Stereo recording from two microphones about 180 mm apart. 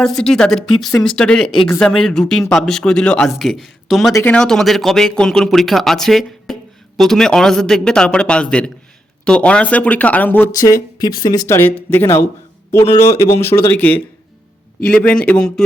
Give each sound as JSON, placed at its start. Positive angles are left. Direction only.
{"t": 0.0, "sound": "speech", "side_deg": 5}
{"t": 4.1, "sound": "speech", "side_deg": 10}